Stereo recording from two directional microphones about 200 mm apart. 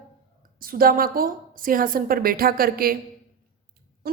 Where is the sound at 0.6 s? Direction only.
45° right (ahead or behind).